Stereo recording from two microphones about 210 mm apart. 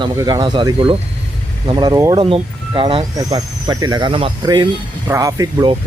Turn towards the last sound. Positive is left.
turn(degrees=-15)  # may be behind; listen again after turning